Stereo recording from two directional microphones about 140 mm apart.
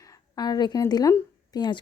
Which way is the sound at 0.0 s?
25° left (ahead or behind).